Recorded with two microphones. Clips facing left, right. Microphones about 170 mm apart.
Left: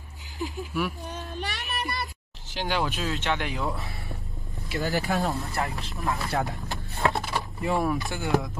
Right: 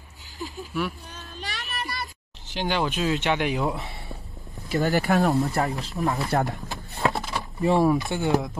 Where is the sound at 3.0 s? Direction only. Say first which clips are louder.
Right 5 dB; 15° right (ahead or behind).